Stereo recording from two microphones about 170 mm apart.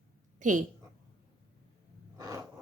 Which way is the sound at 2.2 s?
20° right (ahead or behind).